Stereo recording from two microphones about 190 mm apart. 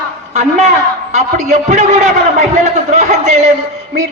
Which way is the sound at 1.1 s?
35° right (ahead or behind).